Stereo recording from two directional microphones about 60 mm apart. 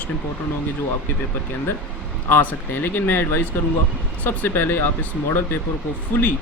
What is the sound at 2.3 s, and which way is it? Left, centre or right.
Speech, left.